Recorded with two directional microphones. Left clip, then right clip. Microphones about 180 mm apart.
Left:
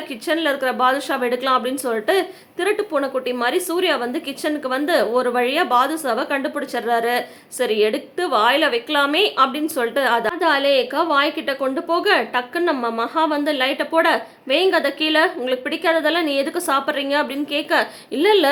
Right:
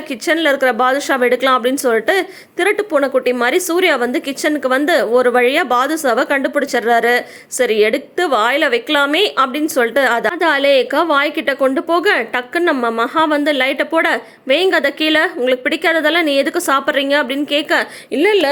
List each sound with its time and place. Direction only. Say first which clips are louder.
0.1 s a woman's voice: right 6 dB; 35° right (ahead or behind)